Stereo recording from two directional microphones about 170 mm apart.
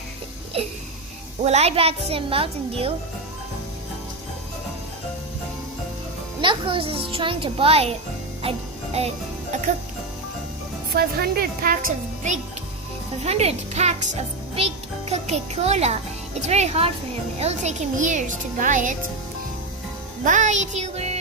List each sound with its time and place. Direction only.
0.5 s music: 35° right (ahead or behind)
1.4 s a child's voice: 40° right (ahead or behind)
6.4 s a child's voice: 30° right (ahead or behind)
8.4 s music: 35° right (ahead or behind)
10.9 s speech: 60° right (ahead or behind)
13.2 s a child's voice: 40° right (ahead or behind)
15.1 s a child's voice: 40° right (ahead or behind)
20.2 s a child's voice: 45° right (ahead or behind)